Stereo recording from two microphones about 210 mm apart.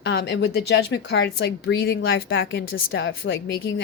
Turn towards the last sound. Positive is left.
turn(degrees=65)  # may be behind; listen again after turning